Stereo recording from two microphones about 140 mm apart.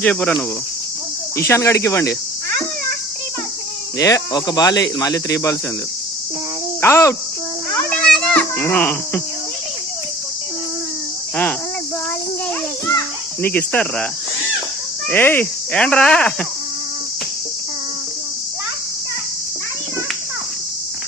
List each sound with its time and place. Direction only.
0.0 s speech: 10° left (ahead or behind)
1.4 s speech: 20° left (ahead or behind)
3.9 s speech: 25° left (ahead or behind)
6.8 s speech: 20° left (ahead or behind)
7.7 s insect: 10° left (ahead or behind)
13.4 s speech: 10° left (ahead or behind)
15.1 s speech: 15° left (ahead or behind)